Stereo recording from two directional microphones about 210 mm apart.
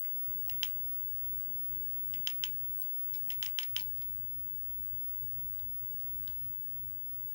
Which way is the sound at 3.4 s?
15° right (ahead or behind).